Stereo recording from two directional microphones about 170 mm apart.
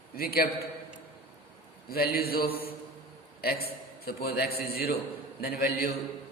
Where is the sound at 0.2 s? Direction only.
65° left (ahead or behind).